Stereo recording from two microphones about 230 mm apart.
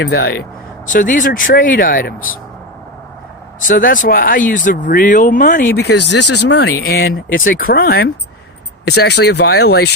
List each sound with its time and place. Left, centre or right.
0.0 s speech: left
3.8 s speech: left